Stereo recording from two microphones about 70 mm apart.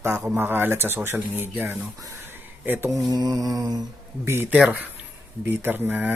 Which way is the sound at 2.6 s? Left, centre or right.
Right.